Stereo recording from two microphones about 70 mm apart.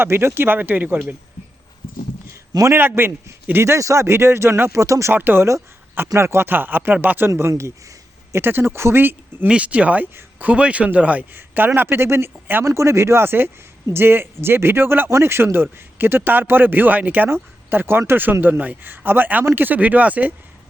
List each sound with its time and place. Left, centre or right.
0.0 s speech: right
2.6 s speech: right
3.6 s speech: right
4.8 s speech: right
5.1 s speech: right
7.3 s speech: right
9.5 s speech: centre
12.6 s speech: right